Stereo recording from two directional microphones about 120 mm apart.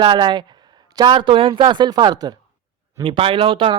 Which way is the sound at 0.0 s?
40° right (ahead or behind).